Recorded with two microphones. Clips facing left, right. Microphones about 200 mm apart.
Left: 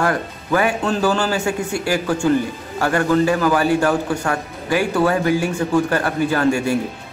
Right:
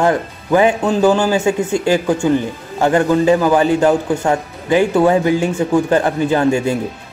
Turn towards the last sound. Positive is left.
turn(degrees=-20)  # may be behind; listen again after turning